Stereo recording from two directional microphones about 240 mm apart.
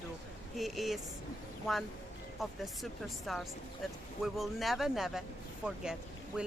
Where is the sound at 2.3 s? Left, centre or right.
Centre.